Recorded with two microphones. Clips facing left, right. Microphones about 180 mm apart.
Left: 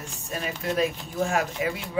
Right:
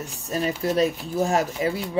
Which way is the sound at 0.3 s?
35° right (ahead or behind).